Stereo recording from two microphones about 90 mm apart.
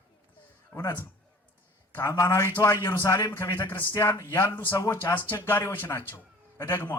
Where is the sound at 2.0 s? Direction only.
25° left (ahead or behind).